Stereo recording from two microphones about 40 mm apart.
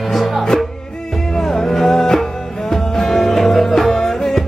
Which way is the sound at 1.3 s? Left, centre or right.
Centre.